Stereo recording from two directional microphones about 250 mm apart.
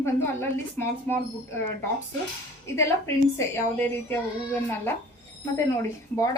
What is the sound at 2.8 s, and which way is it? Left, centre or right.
A woman's voice, centre.